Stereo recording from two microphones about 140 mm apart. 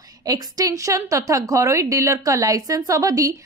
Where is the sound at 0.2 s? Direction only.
25° right (ahead or behind).